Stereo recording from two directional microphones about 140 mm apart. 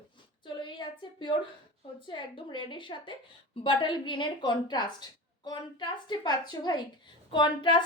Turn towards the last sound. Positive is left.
turn(degrees=35)  # may be behind; listen again after turning